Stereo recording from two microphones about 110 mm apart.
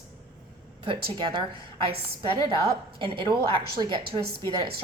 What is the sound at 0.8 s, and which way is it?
Speech, 50° right (ahead or behind).